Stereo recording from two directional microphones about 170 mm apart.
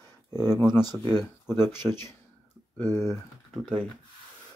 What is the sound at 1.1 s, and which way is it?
Speech, 15° left (ahead or behind).